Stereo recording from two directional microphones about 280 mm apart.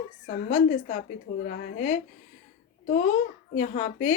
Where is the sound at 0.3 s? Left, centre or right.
Left.